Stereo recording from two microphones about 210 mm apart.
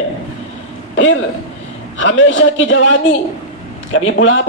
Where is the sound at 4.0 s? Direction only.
65° left (ahead or behind).